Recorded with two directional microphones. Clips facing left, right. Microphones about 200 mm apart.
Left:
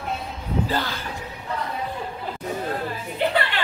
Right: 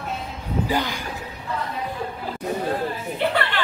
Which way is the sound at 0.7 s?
15° right (ahead or behind).